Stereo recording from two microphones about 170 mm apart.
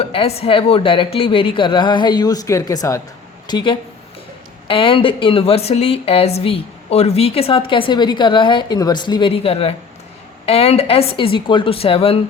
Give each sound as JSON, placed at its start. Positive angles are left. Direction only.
{"t": 0.0, "sound": "a woman's voice", "side_deg": 35}